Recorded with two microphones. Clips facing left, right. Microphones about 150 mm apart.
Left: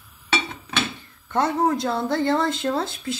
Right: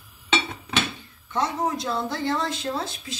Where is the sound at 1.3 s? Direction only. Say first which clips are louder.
Left 5 dB; 55° left (ahead or behind).